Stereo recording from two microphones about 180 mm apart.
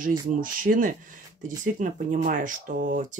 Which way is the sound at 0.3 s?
50° right (ahead or behind).